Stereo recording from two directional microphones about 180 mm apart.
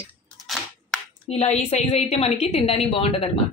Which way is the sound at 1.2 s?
35° left (ahead or behind).